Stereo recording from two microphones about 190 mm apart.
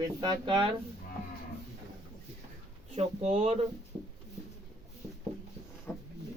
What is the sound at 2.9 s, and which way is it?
Speech, 35° right (ahead or behind).